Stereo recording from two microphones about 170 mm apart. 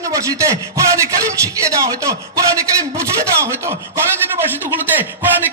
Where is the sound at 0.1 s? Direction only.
20° right (ahead or behind).